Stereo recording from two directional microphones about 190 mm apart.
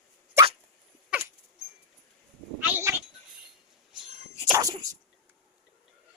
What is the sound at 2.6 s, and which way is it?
Cat, 10° right (ahead or behind).